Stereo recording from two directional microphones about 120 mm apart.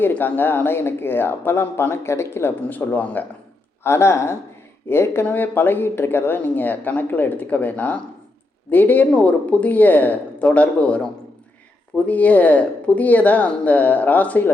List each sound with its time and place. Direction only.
0.0 s speech: 15° left (ahead or behind)